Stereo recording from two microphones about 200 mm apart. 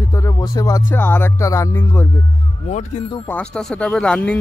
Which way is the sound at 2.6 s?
35° left (ahead or behind).